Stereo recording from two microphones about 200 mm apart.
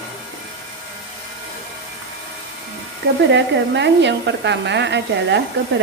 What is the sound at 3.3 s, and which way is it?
A woman's voice, 60° right (ahead or behind).